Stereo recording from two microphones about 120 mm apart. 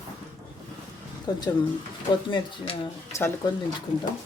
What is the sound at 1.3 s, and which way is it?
Speech, 35° left (ahead or behind).